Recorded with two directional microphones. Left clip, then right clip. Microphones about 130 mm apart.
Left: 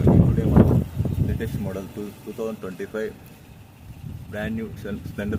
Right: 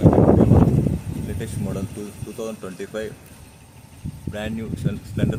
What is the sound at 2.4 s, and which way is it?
Speech, 5° right (ahead or behind).